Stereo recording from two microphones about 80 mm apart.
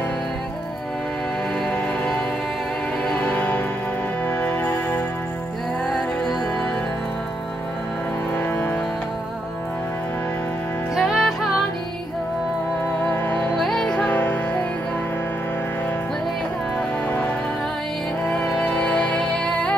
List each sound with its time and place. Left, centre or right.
3.2 s music: centre
8.4 s music: left
11.0 s music: centre
13.0 s music: left
13.6 s music: centre
14.1 s music: left
18.5 s music: centre